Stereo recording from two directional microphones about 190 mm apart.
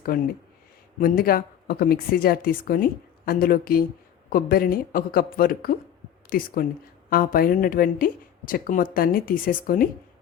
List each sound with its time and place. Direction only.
0.9 s speech: 50° left (ahead or behind)